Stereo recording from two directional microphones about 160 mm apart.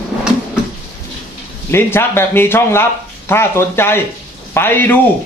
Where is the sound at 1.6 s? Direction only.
15° left (ahead or behind).